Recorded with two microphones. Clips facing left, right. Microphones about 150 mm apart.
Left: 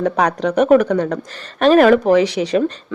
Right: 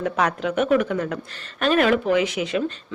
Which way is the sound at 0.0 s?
35° left (ahead or behind).